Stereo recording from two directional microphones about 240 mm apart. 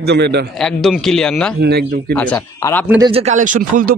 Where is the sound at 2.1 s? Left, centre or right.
Centre.